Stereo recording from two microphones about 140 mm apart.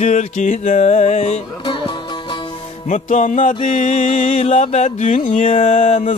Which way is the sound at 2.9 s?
60° left (ahead or behind).